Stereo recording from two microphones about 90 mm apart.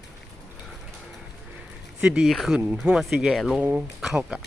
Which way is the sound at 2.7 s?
15° right (ahead or behind).